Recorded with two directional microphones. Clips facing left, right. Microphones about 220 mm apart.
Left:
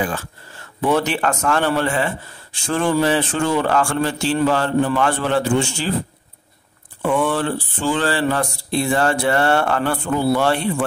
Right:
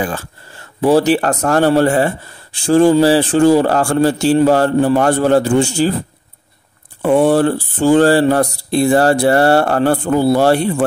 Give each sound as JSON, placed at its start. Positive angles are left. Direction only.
{"t": 0.0, "sound": "speech", "side_deg": -35}
{"t": 7.0, "sound": "speech", "side_deg": -40}